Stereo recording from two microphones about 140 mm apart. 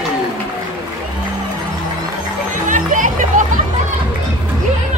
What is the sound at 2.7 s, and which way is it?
Music, 65° right (ahead or behind).